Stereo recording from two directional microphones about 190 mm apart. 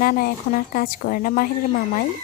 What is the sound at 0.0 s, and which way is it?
Speech, 50° left (ahead or behind).